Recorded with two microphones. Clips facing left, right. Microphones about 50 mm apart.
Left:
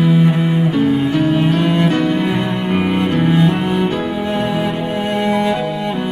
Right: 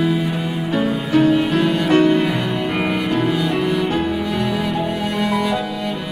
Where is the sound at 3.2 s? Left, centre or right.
Left.